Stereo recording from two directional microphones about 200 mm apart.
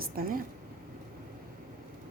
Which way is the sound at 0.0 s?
45° right (ahead or behind).